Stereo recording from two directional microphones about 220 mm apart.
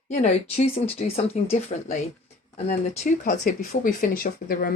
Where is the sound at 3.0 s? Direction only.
40° left (ahead or behind).